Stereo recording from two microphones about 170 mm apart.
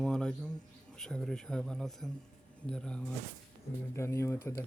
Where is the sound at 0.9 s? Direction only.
5° left (ahead or behind).